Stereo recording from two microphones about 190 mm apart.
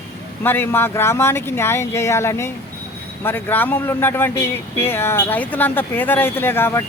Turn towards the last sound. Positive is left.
turn(degrees=10)  # may be behind; listen again after turning